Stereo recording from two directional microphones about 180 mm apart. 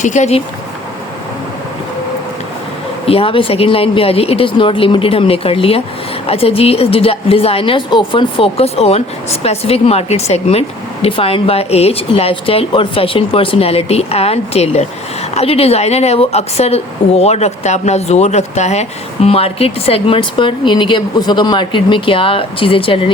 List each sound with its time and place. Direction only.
0.0 s a woman's voice: 40° left (ahead or behind)
3.1 s a woman's voice: 30° left (ahead or behind)